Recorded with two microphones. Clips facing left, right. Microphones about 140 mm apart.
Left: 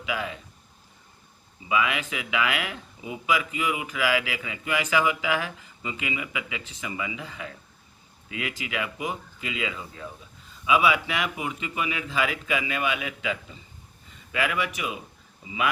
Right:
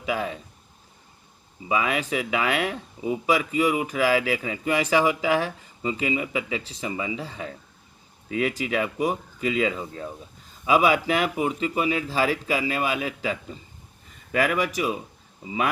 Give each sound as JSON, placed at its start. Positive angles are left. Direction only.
{"t": 0.0, "sound": "speech", "side_deg": -40}
{"t": 1.6, "sound": "speech", "side_deg": -40}